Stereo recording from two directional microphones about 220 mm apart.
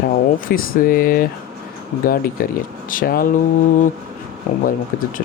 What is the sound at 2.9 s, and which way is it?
Speech, 40° left (ahead or behind).